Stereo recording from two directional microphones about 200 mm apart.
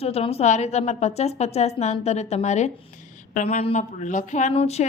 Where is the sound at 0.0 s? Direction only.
30° left (ahead or behind).